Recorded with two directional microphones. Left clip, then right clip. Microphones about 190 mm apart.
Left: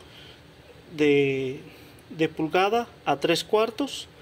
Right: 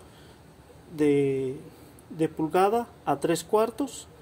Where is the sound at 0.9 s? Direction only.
10° right (ahead or behind).